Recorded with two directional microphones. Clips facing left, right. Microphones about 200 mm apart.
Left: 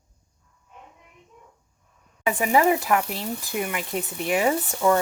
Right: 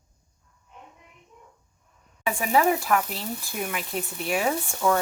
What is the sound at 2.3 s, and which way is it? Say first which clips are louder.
Speech: left 2 dB; 10° left (ahead or behind).